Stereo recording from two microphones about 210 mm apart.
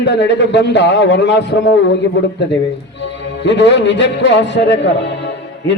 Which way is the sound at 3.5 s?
55° left (ahead or behind).